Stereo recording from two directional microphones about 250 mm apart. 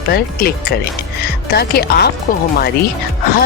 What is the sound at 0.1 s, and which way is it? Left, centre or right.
Speech, left.